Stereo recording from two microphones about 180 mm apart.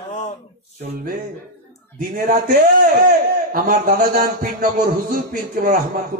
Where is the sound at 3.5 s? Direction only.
50° right (ahead or behind).